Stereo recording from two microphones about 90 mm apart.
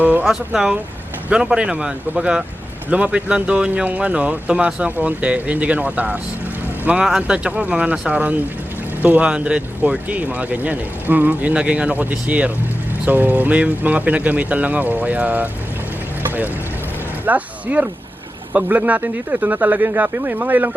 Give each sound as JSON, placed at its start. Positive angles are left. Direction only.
{"t": 0.0, "sound": "speech", "side_deg": -20}
{"t": 0.3, "sound": "speech", "side_deg": -5}
{"t": 17.2, "sound": "a sound", "side_deg": -15}
{"t": 18.5, "sound": "speech", "side_deg": -15}